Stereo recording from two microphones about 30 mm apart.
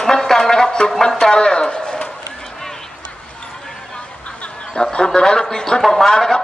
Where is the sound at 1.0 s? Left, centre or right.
Left.